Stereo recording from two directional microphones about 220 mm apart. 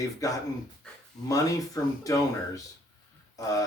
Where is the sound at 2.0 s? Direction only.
15° left (ahead or behind).